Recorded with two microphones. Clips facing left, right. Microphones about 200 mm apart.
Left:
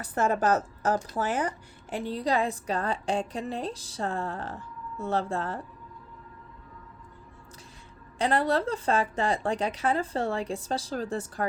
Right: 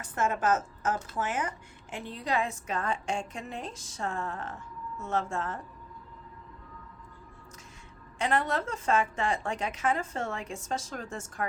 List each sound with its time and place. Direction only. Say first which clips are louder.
0.0 s speech: left 4 dB; 35° left (ahead or behind)
8.2 s speech: left 4 dB; 35° left (ahead or behind)